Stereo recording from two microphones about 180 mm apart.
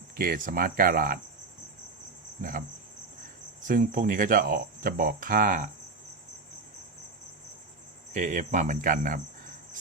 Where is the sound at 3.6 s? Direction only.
45° right (ahead or behind).